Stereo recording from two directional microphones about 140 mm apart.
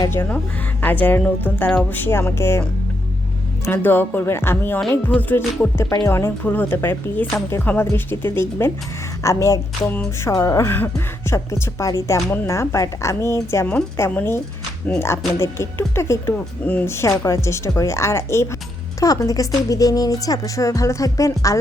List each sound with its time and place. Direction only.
0.1 s speech: 15° left (ahead or behind)
3.7 s a woman's voice: 15° left (ahead or behind)